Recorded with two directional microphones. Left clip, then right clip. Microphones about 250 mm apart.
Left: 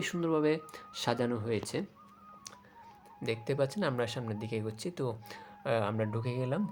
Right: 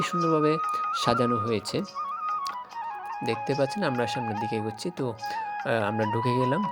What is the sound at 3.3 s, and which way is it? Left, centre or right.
Speech, centre.